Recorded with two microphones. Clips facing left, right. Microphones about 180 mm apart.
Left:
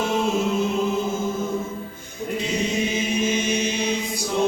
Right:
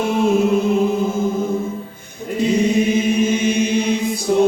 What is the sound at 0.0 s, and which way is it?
Music, 55° right (ahead or behind).